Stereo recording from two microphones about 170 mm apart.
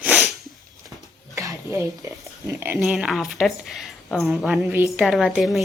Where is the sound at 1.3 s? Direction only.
15° right (ahead or behind).